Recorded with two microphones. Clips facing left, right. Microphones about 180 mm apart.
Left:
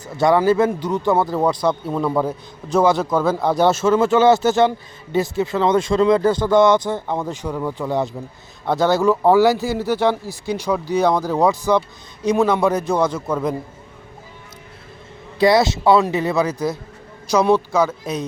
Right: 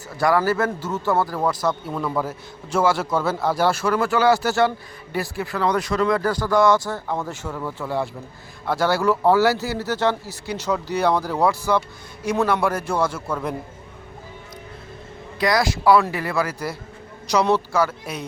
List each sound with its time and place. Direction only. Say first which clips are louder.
0.2 s speech: left 5 dB; 20° left (ahead or behind)
15.4 s speech: left 6 dB; 25° left (ahead or behind)